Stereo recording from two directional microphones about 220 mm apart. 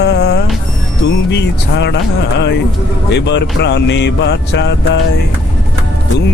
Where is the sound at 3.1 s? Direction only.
50° left (ahead or behind).